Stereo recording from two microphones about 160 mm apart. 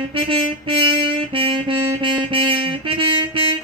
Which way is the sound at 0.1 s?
35° right (ahead or behind).